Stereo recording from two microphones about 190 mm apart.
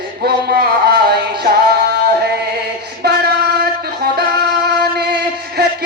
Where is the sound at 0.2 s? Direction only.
55° right (ahead or behind).